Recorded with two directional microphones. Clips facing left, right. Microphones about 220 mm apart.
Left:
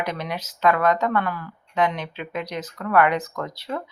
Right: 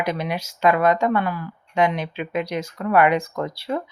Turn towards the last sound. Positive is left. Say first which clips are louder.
# right 4 dB
turn(degrees=-10)  # may be behind; listen again after turning